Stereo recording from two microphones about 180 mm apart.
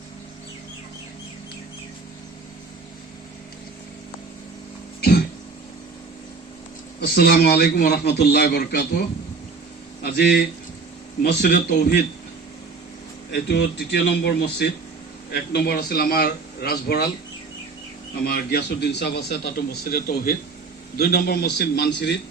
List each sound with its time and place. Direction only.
4.9 s cough: 65° left (ahead or behind)
7.0 s a man's voice: 65° left (ahead or behind)
13.3 s a man's voice: 70° left (ahead or behind)
18.3 s a man's voice: 65° left (ahead or behind)